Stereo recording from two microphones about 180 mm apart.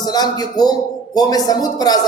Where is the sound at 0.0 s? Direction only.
20° left (ahead or behind).